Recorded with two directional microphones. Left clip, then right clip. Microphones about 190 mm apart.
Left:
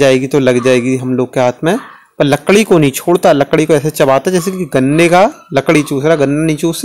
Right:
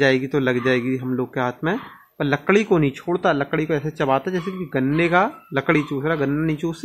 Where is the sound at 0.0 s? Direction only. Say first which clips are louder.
Left 9 dB; 35° left (ahead or behind).